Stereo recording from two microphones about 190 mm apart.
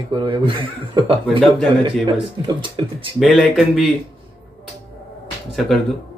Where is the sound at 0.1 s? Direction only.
25° right (ahead or behind).